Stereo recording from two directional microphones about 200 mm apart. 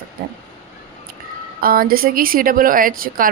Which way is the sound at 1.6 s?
45° right (ahead or behind).